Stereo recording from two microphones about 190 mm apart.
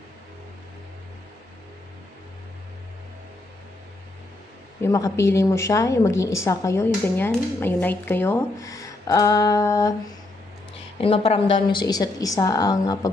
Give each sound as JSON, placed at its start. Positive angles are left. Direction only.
{"t": 4.8, "sound": "speech", "side_deg": 15}
{"t": 11.0, "sound": "a woman's voice", "side_deg": 30}